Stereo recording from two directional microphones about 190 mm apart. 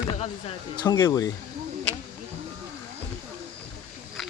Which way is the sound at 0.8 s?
15° left (ahead or behind).